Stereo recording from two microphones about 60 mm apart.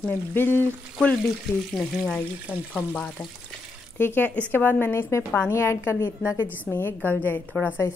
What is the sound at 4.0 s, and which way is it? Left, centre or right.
A woman's voice, left.